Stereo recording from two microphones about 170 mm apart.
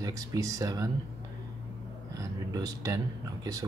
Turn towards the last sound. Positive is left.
turn(degrees=-20)  # may be behind; listen again after turning